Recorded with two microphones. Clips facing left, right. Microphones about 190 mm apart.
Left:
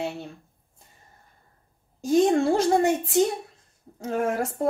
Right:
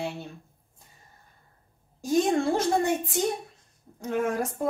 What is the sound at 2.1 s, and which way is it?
Speech, 25° left (ahead or behind).